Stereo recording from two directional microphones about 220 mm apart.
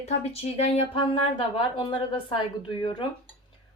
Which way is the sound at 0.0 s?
30° left (ahead or behind).